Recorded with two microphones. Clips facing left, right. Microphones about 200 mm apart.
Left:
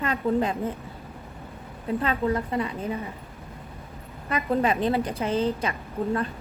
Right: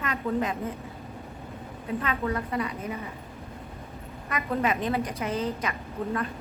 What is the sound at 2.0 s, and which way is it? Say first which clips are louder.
Speech: left 4 dB; 30° left (ahead or behind).